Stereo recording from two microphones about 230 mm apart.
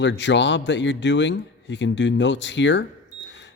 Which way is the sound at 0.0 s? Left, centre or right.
Left.